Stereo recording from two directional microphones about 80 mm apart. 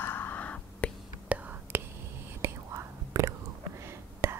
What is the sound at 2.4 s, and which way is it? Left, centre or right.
Whispering, right.